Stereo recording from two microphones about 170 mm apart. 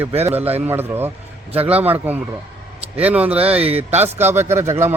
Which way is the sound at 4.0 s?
15° right (ahead or behind).